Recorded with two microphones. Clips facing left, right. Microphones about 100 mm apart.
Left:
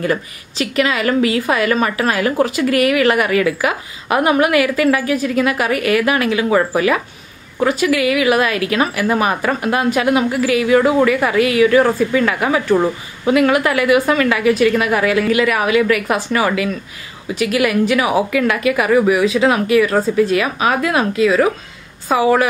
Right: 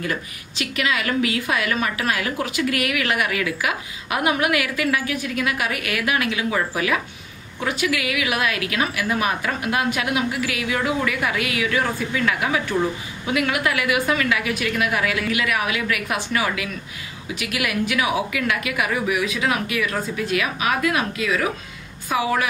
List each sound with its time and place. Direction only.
0.1 s a woman's voice: 40° left (ahead or behind)